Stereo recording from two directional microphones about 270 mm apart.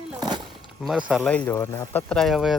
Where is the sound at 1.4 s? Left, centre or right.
Centre.